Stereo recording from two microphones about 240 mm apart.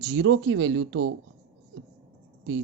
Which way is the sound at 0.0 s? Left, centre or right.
Right.